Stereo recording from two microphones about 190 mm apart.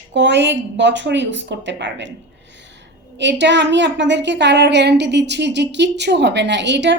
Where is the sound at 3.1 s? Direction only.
70° right (ahead or behind).